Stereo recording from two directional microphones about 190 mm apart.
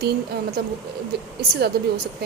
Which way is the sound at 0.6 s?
55° right (ahead or behind).